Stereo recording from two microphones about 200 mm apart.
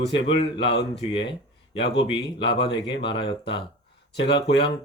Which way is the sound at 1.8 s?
60° left (ahead or behind).